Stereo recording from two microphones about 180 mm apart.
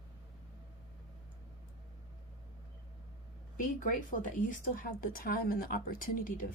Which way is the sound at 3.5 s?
45° left (ahead or behind).